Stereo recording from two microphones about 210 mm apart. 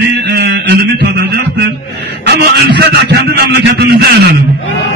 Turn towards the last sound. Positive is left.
turn(degrees=-50)  # may be behind; listen again after turning